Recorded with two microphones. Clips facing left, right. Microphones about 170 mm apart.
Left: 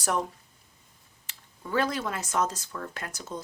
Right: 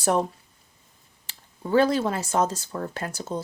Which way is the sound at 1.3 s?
30° right (ahead or behind).